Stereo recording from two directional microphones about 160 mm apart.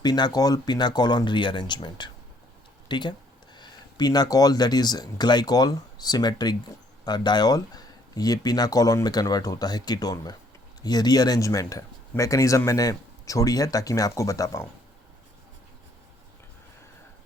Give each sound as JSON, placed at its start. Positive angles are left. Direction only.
{"t": 0.0, "sound": "speech", "side_deg": 25}